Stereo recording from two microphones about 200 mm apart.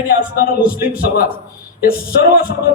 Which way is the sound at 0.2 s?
45° left (ahead or behind).